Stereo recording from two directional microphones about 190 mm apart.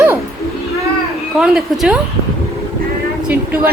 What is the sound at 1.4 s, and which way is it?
Speech, 5° right (ahead or behind).